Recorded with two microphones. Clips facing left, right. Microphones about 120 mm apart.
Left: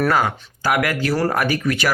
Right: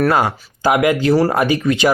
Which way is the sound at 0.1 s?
25° right (ahead or behind).